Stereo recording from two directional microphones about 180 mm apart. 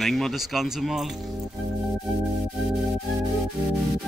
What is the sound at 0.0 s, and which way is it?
Speech, centre (ahead or behind).